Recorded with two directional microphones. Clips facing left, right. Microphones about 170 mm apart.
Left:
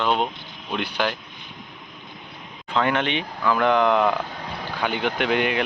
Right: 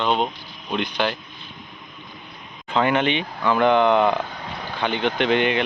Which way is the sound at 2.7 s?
5° right (ahead or behind).